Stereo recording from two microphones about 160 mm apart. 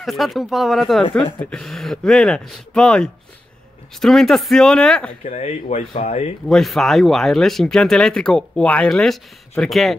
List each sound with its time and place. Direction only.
0.0 s speech: centre (ahead or behind)
5.2 s speech: 45° left (ahead or behind)
6.5 s speech: centre (ahead or behind)